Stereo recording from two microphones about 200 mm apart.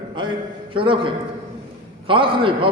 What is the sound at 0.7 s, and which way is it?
A man's voice, 25° right (ahead or behind).